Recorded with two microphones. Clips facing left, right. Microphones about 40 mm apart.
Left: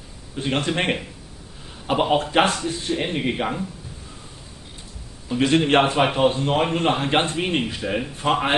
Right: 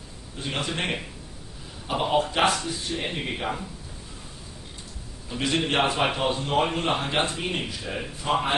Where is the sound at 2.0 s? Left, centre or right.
Left.